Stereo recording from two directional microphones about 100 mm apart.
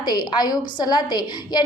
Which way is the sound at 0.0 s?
45° left (ahead or behind).